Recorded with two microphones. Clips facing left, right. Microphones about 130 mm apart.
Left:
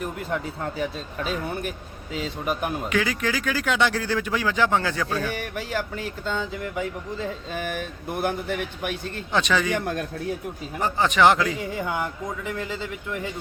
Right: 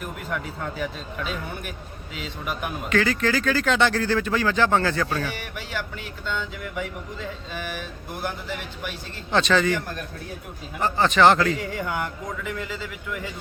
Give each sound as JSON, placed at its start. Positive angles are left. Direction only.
{"t": 0.0, "sound": "speech", "side_deg": 30}
{"t": 2.9, "sound": "speech", "side_deg": 10}
{"t": 5.0, "sound": "speech", "side_deg": -10}
{"t": 5.3, "sound": "a sound", "side_deg": 45}
{"t": 9.3, "sound": "speech", "side_deg": 10}
{"t": 10.8, "sound": "a man's voice", "side_deg": 10}